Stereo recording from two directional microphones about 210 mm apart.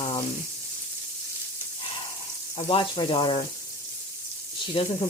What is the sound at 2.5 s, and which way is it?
Frying, 25° left (ahead or behind).